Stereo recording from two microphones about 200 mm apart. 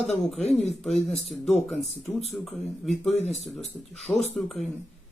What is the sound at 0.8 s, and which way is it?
Speech, centre (ahead or behind).